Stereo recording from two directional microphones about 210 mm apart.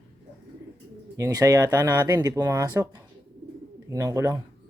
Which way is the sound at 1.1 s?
15° right (ahead or behind).